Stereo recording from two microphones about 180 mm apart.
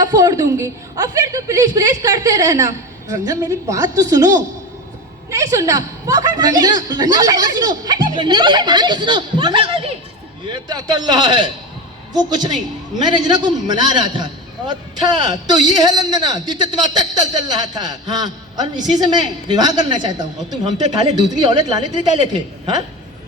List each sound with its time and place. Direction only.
0.0 s a woman's voice: 20° right (ahead or behind)